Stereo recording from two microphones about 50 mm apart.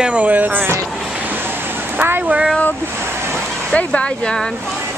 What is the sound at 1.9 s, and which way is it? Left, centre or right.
Speech, right.